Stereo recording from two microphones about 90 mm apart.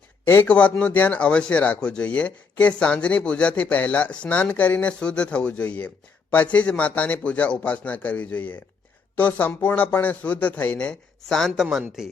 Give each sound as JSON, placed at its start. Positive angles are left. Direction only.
{"t": 0.4, "sound": "speech", "side_deg": 15}